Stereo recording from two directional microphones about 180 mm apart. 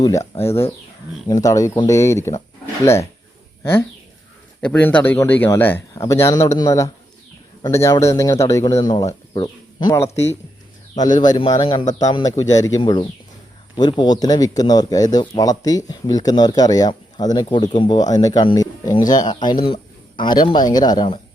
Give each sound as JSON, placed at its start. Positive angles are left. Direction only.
{"t": 0.0, "sound": "speech", "side_deg": 15}